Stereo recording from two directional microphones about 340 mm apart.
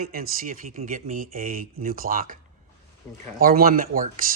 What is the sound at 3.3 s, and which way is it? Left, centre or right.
Speech, right.